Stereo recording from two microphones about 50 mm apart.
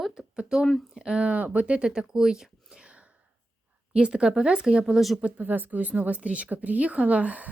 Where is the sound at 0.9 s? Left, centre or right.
Centre.